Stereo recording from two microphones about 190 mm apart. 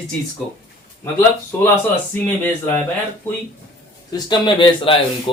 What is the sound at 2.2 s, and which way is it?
Speech, 10° left (ahead or behind).